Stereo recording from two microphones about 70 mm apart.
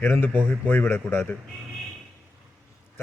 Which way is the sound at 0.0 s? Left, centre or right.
Left.